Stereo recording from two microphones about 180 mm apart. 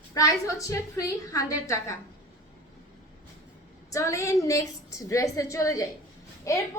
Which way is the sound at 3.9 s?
15° left (ahead or behind).